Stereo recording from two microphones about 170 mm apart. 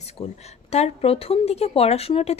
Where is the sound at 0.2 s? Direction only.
30° left (ahead or behind).